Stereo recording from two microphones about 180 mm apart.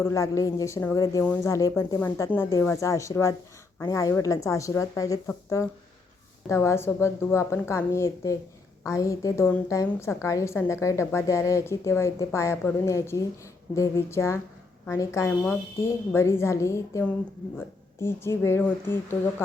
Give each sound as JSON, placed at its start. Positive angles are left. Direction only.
{"t": 0.0, "sound": "a woman's voice", "side_deg": 15}